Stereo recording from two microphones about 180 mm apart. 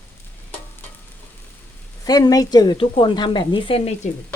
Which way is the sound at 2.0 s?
20° left (ahead or behind).